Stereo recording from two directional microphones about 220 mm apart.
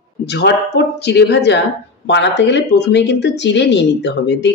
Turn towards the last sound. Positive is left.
turn(degrees=50)  # may be behind; listen again after turning